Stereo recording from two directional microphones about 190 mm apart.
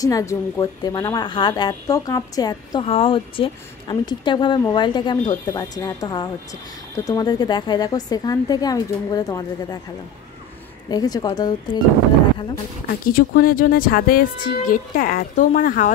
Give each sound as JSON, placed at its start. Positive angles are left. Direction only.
{"t": 0.0, "sound": "a woman's voice", "side_deg": 15}
{"t": 10.9, "sound": "a woman's voice", "side_deg": 20}
{"t": 12.8, "sound": "speech", "side_deg": 50}